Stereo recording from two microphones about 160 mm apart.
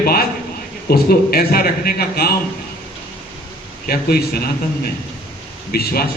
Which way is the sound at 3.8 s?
70° left (ahead or behind).